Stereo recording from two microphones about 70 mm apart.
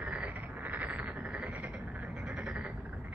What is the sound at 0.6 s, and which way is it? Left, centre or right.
Frog, right.